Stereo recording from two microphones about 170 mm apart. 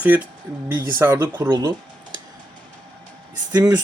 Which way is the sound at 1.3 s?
25° right (ahead or behind).